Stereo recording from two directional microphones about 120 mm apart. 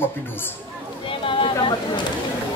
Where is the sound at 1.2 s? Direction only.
45° left (ahead or behind).